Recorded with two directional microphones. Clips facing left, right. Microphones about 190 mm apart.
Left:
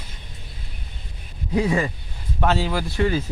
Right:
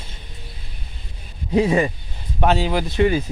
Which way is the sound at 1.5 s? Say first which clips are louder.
Right 4 dB; 20° right (ahead or behind).